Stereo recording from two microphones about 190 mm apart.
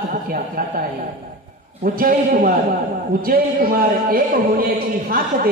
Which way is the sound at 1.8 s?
50° right (ahead or behind).